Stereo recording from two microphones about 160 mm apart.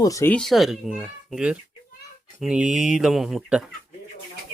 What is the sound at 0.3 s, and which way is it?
Speech, centre (ahead or behind).